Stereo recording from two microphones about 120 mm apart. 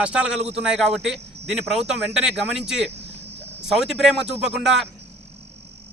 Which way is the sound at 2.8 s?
60° right (ahead or behind).